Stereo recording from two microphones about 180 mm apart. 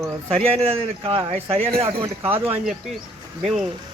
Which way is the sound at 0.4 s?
35° right (ahead or behind).